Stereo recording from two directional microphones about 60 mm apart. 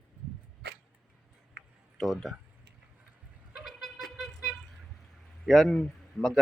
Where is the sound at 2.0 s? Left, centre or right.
Centre.